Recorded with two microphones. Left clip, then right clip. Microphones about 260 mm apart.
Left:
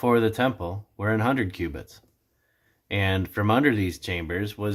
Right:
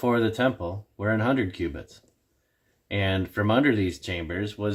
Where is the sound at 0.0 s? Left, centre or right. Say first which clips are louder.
Left 2 dB; centre.